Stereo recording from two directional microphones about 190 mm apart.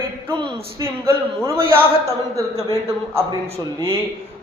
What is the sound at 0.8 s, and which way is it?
A man's voice, 15° right (ahead or behind).